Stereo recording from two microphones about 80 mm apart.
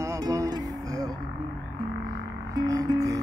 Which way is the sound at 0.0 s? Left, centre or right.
Right.